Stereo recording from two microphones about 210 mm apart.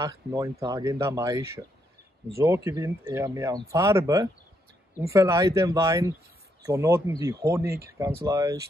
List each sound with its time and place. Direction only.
0.0 s speech: 15° right (ahead or behind)